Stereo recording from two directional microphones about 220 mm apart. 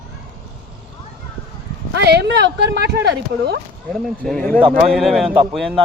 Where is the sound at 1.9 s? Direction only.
50° right (ahead or behind).